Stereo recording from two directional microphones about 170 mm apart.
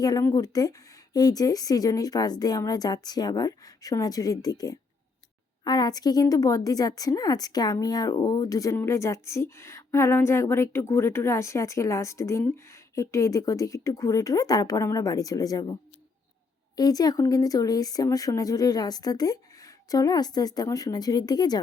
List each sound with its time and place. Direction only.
0.0 s a woman's voice: 20° left (ahead or behind)